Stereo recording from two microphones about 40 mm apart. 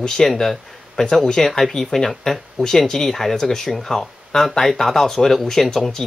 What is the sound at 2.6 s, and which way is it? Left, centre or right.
Speech, centre.